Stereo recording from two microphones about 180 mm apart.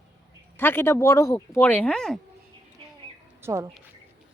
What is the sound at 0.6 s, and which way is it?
Speech, 10° left (ahead or behind).